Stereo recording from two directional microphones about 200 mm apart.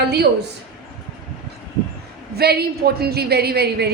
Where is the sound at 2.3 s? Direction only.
50° right (ahead or behind).